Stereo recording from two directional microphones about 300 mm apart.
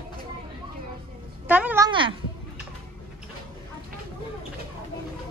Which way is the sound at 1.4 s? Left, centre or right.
Centre.